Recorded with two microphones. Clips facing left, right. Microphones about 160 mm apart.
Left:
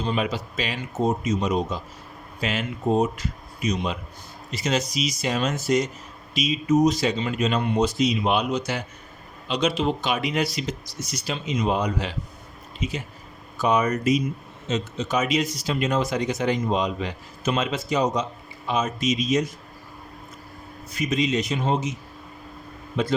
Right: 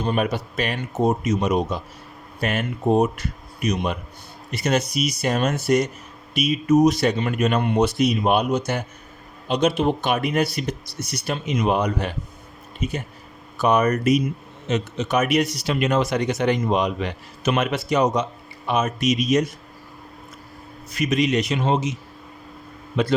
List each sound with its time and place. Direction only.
0.0 s speech: 55° right (ahead or behind)
20.9 s a man's voice: 70° right (ahead or behind)